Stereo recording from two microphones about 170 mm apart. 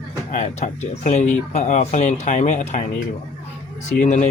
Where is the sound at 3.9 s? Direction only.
45° left (ahead or behind).